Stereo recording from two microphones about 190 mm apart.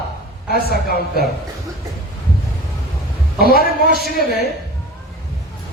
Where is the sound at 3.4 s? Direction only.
50° left (ahead or behind).